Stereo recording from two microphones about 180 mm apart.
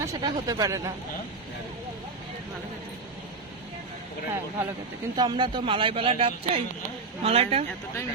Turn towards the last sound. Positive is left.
turn(degrees=-35)  # may be behind; listen again after turning